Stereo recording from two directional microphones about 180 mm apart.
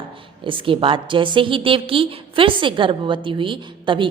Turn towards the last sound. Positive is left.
turn(degrees=-25)  # may be behind; listen again after turning